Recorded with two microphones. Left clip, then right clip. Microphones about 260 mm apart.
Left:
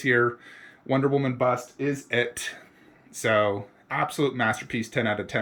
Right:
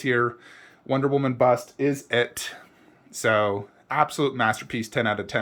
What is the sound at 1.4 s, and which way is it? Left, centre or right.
Speech, centre.